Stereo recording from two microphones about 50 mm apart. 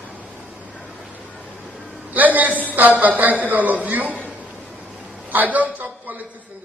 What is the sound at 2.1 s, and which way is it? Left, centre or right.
A man's voice, right.